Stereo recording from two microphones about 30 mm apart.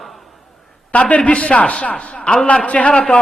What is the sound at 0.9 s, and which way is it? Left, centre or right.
A man's voice, left.